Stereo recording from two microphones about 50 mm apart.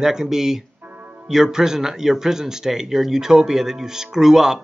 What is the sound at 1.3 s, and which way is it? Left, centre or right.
A man's voice, centre.